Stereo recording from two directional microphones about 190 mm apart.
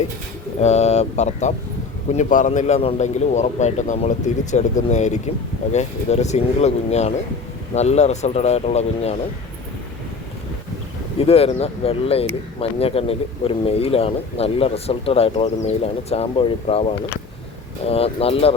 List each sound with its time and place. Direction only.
0.6 s speech: 35° left (ahead or behind)
11.2 s speech: 30° left (ahead or behind)
17.8 s speech: 30° left (ahead or behind)